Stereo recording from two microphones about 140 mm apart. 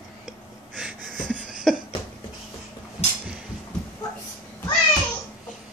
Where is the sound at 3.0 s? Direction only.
50° left (ahead or behind).